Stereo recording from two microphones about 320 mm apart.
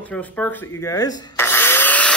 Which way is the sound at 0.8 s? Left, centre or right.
Centre.